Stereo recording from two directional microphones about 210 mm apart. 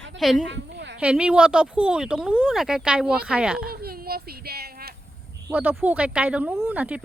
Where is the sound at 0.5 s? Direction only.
55° right (ahead or behind).